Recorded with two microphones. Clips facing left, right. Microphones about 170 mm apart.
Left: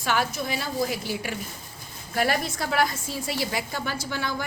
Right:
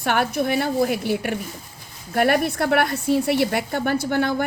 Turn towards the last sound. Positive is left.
turn(degrees=-55)  # may be behind; listen again after turning